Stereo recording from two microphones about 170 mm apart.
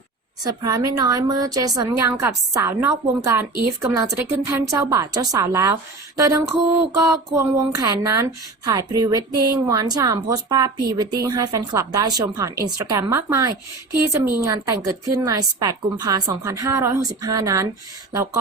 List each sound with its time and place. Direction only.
0.4 s a woman's voice: 20° right (ahead or behind)